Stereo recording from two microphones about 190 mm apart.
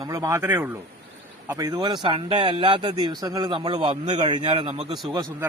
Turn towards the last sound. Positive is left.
turn(degrees=-20)  # may be behind; listen again after turning